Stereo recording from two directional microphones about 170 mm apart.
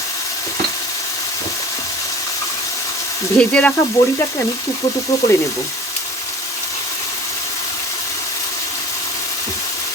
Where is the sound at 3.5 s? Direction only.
10° left (ahead or behind).